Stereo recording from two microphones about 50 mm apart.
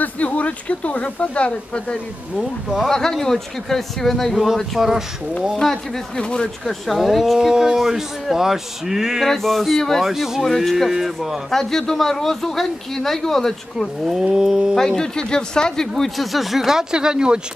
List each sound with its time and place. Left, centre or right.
0.0 s speech: left
2.8 s speech: centre
5.6 s speech: centre
6.6 s speech: centre
9.2 s speech: centre
10.0 s speech: centre
10.4 s speech: centre
10.9 s speech: centre
11.5 s speech: centre
14.2 s speech: centre
14.8 s speech: centre
16.0 s speech: centre
16.9 s speech: centre